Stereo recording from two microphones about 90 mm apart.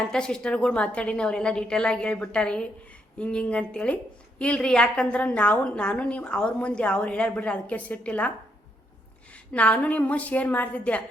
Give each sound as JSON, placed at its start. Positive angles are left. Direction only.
{"t": 0.0, "sound": "a woman's voice", "side_deg": 5}
{"t": 9.3, "sound": "a woman's voice", "side_deg": 15}